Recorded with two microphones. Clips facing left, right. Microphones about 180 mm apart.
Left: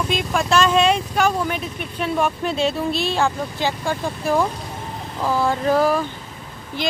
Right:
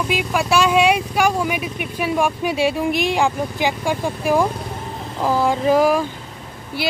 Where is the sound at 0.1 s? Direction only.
10° right (ahead or behind).